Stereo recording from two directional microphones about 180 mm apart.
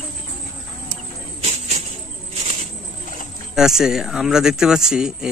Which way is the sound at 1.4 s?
35° right (ahead or behind).